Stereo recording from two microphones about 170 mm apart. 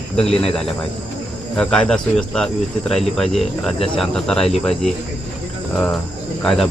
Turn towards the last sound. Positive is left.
turn(degrees=0)  # may be behind; listen again after turning